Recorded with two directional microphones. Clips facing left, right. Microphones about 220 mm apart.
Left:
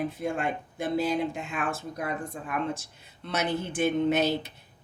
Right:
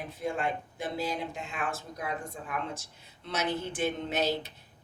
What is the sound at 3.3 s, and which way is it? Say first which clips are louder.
Speech: left 3 dB; 55° left (ahead or behind).